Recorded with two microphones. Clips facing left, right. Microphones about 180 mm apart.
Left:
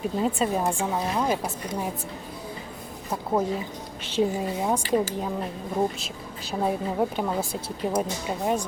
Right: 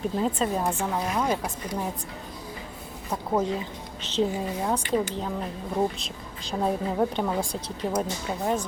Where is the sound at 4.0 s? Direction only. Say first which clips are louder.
Left 1 dB; 10° left (ahead or behind).